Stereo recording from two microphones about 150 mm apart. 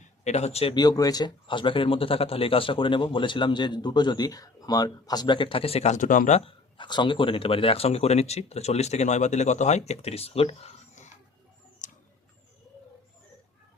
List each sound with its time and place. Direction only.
0.3 s speech: 45° left (ahead or behind)
0.7 s speech: 25° left (ahead or behind); by 6.5 s 50° left (ahead or behind)
6.7 s speech: 30° left (ahead or behind); by 11.1 s 50° left (ahead or behind)
11.8 s a sound: 55° left (ahead or behind)